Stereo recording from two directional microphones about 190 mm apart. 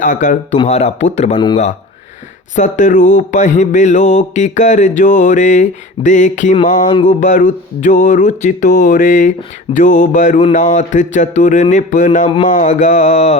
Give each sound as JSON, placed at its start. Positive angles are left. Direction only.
{"t": 0.0, "sound": "speech", "side_deg": 45}
{"t": 0.6, "sound": "mantra", "side_deg": 35}
{"t": 2.6, "sound": "mantra", "side_deg": 40}
{"t": 7.1, "sound": "speech", "side_deg": 45}
{"t": 9.7, "sound": "mantra", "side_deg": 45}